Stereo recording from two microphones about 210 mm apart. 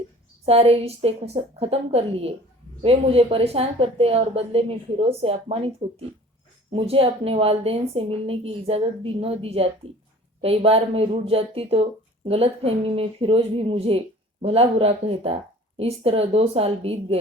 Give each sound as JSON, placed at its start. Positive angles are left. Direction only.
{"t": 0.4, "sound": "a woman's voice", "side_deg": -30}